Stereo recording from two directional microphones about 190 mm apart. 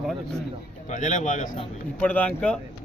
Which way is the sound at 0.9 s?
40° left (ahead or behind).